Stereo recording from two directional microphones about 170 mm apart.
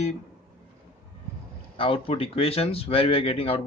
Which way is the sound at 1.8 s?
30° left (ahead or behind).